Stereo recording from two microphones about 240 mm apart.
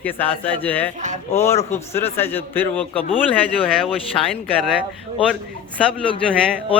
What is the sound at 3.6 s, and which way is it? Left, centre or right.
Speech, left.